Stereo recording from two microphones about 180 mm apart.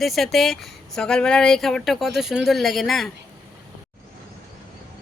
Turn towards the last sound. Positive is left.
turn(degrees=0)  # may be behind; listen again after turning